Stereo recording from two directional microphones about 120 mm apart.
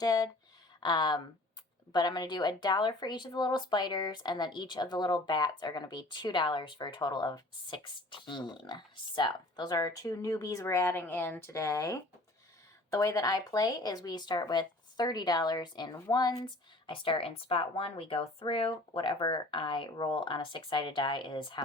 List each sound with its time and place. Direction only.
0.0 s a woman's voice: 30° left (ahead or behind)